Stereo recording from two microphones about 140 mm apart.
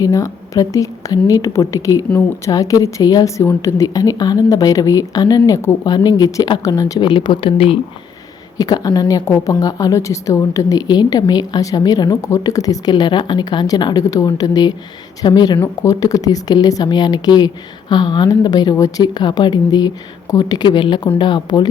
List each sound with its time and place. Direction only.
0.0 s a woman's voice: 25° left (ahead or behind); by 7.8 s 40° left (ahead or behind)
8.5 s a woman's voice: 30° left (ahead or behind)
15.5 s a woman's voice: 15° left (ahead or behind); by 21.7 s 35° left (ahead or behind)